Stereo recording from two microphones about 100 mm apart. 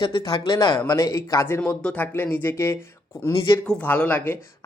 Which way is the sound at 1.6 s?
15° left (ahead or behind).